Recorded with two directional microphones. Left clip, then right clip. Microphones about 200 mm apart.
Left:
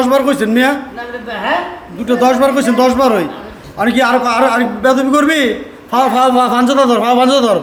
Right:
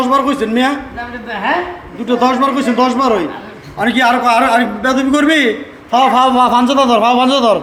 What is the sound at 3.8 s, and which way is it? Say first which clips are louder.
A man's voice: even; 20° left (ahead or behind).